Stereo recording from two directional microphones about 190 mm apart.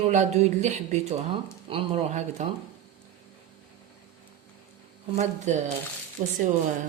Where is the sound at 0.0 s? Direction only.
35° right (ahead or behind).